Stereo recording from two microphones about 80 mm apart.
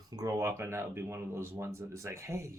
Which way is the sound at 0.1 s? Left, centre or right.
Right.